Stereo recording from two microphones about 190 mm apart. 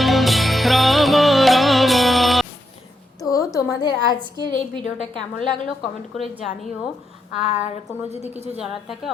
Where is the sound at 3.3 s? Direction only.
15° left (ahead or behind).